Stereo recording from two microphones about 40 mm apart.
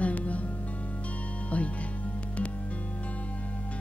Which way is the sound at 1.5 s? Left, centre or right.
Left.